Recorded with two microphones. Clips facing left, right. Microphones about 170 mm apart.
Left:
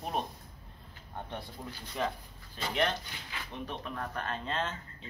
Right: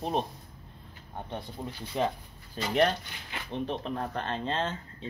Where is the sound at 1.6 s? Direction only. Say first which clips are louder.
Right 5 dB; 15° right (ahead or behind).